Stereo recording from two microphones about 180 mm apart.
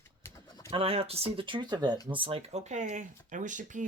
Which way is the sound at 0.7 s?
30° right (ahead or behind).